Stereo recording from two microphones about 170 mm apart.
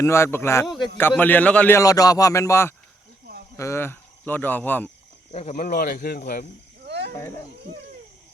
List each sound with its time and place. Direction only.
0.0 s a man's voice: 15° left (ahead or behind)
0.6 s speech: centre (ahead or behind)
0.9 s a man's voice: 10° left (ahead or behind)
5.3 s speech: 40° left (ahead or behind); by 6.4 s 60° left (ahead or behind)
6.8 s cricket: 80° right